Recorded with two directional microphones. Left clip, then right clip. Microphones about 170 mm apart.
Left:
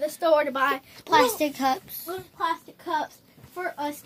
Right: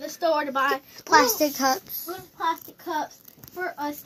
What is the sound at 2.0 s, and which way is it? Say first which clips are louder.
Speech: even; 35° left (ahead or behind).